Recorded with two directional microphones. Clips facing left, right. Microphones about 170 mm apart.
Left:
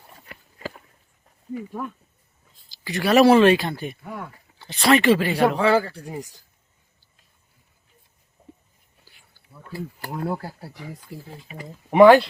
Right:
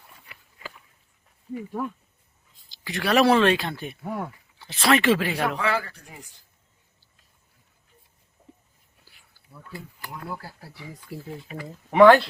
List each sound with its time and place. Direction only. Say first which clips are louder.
0.3 s a sound: left 9 dB; 50° left (ahead or behind)
2.6 s speech: left 4 dB; centre (ahead or behind)
5.4 s speech: left 7 dB; 30° left (ahead or behind)
9.0 s whispering: even; centre (ahead or behind)
10.1 s speech: left 9 dB; 50° left (ahead or behind)
11.1 s speech: right 1 dB; 10° right (ahead or behind)
11.5 s speech: left 3 dB; 20° left (ahead or behind)